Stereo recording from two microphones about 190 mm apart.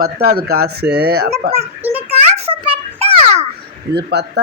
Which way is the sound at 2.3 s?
30° right (ahead or behind).